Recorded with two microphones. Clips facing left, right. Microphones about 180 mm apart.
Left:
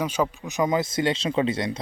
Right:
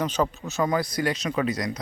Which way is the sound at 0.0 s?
10° left (ahead or behind).